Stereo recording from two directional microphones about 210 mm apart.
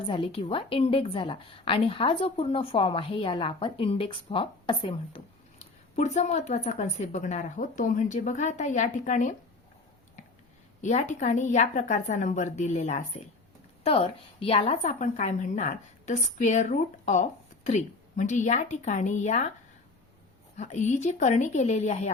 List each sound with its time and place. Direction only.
0.1 s a woman's voice: 25° left (ahead or behind)
10.8 s a woman's voice: 35° left (ahead or behind)
20.6 s a woman's voice: 35° left (ahead or behind)